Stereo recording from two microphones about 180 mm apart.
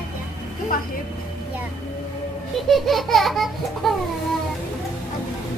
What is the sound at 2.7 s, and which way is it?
Laughter, centre (ahead or behind).